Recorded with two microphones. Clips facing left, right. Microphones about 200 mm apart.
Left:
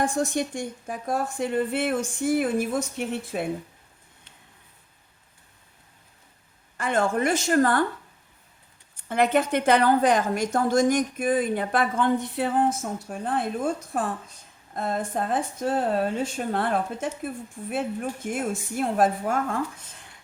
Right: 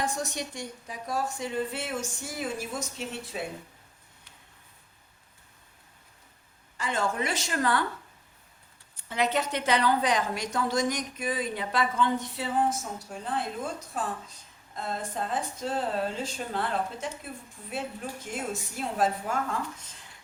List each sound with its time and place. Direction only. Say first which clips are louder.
0.0 s speech: left 7 dB; 50° left (ahead or behind)
6.7 s a woman's voice: left 6 dB; 55° left (ahead or behind)
9.0 s a woman's voice: left 6 dB; 55° left (ahead or behind)